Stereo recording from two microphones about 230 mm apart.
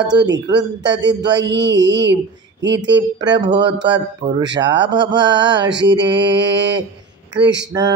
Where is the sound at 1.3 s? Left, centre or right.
Right.